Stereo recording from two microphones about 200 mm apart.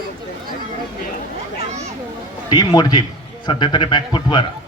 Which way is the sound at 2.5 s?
20° left (ahead or behind).